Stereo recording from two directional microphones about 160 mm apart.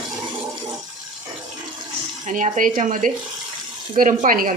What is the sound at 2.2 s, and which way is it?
Speech, 50° right (ahead or behind).